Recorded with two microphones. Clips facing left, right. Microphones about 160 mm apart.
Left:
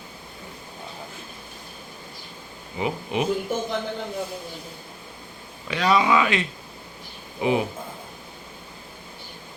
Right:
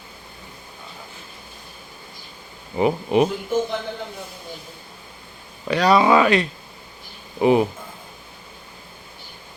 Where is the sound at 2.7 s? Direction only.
45° right (ahead or behind).